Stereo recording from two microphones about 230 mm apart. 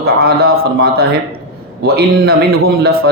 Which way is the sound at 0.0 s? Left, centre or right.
Right.